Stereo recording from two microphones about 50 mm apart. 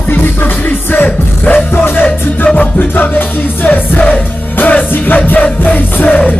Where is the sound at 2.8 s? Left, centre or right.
Left.